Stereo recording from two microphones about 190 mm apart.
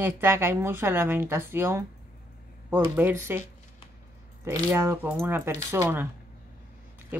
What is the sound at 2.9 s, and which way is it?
Speech, 10° right (ahead or behind).